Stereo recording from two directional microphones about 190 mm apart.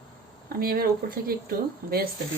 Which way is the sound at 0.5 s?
50° right (ahead or behind).